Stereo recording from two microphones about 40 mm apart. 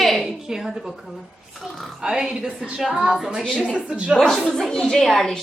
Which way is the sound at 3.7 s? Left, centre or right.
Right.